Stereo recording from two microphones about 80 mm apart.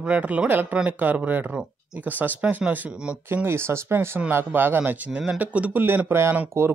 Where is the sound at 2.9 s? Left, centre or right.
Centre.